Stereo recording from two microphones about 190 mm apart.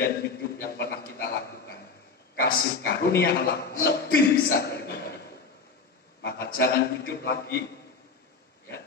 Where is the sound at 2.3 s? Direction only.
50° left (ahead or behind).